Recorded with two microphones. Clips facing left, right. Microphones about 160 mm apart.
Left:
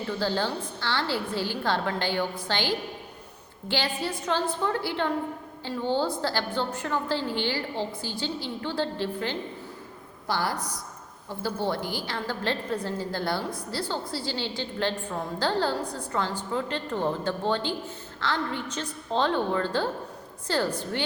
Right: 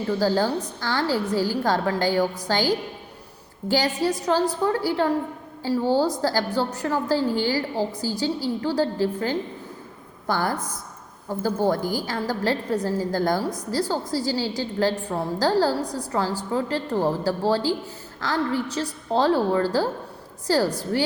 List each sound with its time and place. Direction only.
0.2 s a woman's voice: 40° right (ahead or behind)
10.2 s a woman's voice: 50° right (ahead or behind)